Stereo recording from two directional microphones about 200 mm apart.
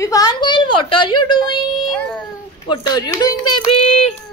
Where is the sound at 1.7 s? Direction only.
Centre (ahead or behind).